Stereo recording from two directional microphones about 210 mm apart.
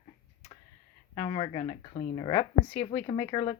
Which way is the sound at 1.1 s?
25° left (ahead or behind).